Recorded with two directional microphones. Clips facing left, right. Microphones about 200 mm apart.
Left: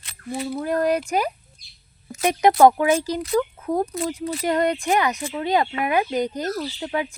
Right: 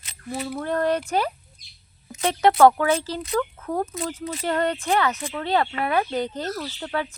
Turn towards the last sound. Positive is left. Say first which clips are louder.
# left 2 dB
turn(degrees=15)  # may be behind; listen again after turning